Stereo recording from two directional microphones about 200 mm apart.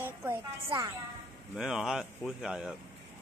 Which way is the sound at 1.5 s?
5° right (ahead or behind).